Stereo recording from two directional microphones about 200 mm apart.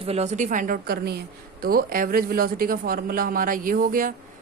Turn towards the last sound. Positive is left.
turn(degrees=-45)  # may be behind; listen again after turning